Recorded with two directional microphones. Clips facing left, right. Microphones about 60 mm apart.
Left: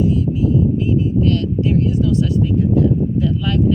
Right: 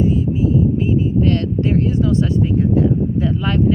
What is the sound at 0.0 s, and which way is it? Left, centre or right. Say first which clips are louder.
Vehicle: even; right.